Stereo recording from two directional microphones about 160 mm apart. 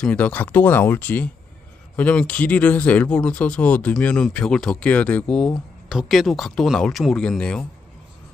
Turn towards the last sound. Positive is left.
turn(degrees=5)  # may be behind; listen again after turning